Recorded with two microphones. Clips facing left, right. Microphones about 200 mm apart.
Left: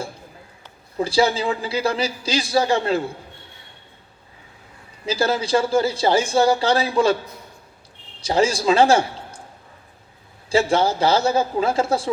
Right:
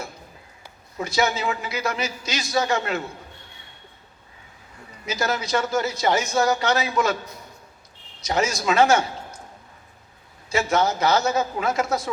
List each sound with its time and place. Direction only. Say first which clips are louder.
0.9 s a man's voice: left 5 dB; 30° left (ahead or behind)
5.0 s a man's voice: left 5 dB; 30° left (ahead or behind)
8.2 s a man's voice: left 5 dB; 30° left (ahead or behind)
10.5 s a man's voice: left 4 dB; 30° left (ahead or behind)